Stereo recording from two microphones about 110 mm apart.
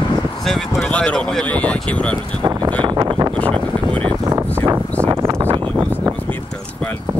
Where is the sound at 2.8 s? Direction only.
45° right (ahead or behind).